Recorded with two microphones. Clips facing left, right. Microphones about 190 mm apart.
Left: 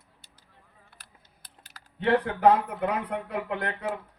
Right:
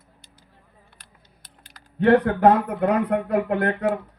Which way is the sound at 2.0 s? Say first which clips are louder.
Right 6 dB; 55° right (ahead or behind).